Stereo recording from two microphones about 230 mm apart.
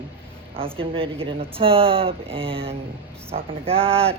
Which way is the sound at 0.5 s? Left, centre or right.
Right.